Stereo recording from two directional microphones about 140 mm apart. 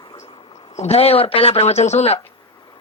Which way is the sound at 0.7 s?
50° left (ahead or behind).